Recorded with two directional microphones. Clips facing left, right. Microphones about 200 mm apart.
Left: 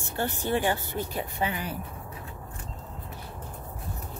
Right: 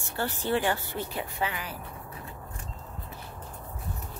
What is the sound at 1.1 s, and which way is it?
Speech, 30° left (ahead or behind).